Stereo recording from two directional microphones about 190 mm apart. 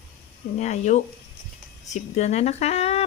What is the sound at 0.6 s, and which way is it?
Speech, 40° left (ahead or behind).